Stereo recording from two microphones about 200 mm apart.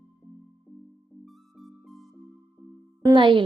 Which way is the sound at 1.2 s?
Centre (ahead or behind).